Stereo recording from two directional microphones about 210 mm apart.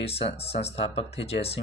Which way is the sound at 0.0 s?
30° left (ahead or behind).